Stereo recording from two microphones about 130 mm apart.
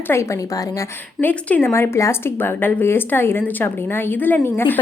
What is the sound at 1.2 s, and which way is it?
Speech, 15° left (ahead or behind).